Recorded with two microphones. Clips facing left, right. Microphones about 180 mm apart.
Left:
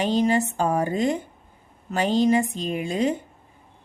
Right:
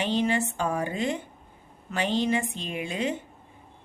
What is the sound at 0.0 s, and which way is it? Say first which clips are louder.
Speech: left 4 dB; 40° left (ahead or behind).